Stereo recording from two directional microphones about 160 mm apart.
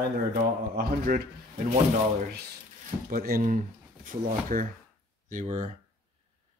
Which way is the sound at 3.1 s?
65° right (ahead or behind).